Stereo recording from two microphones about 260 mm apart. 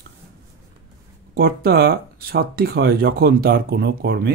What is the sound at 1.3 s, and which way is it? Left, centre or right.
Speech, right.